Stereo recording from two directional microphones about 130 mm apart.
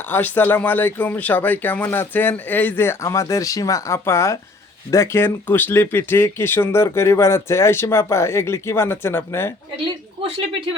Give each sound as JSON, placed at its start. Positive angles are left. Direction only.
{"t": 0.1, "sound": "speech", "side_deg": 15}